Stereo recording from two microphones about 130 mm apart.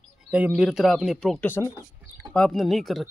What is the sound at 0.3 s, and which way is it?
Speech, 5° right (ahead or behind).